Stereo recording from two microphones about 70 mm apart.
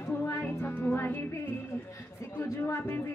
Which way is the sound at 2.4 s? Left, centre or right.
Left.